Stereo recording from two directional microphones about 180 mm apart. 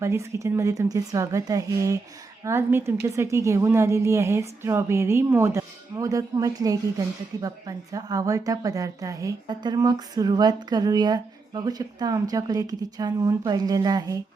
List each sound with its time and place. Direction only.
0.0 s a woman's voice: 15° right (ahead or behind)